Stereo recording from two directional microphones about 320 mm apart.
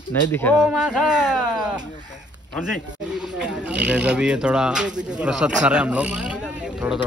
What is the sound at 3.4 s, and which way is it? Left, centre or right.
Speech, centre.